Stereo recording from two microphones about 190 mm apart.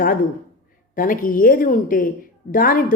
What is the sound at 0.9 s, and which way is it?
Speech, 45° left (ahead or behind).